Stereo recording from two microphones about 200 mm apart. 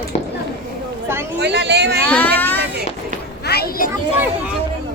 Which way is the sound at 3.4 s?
50° left (ahead or behind).